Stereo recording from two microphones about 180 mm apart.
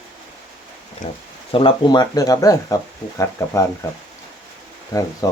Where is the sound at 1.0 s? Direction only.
35° left (ahead or behind); by 3.7 s 15° left (ahead or behind).